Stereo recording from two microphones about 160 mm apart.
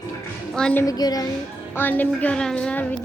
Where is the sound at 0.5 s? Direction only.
10° left (ahead or behind).